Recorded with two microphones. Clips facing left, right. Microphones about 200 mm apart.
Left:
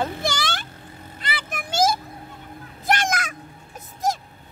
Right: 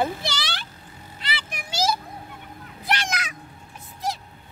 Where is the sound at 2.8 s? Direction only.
50° left (ahead or behind).